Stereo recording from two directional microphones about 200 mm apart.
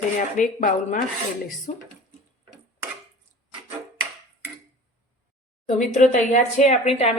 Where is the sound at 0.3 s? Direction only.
40° left (ahead or behind).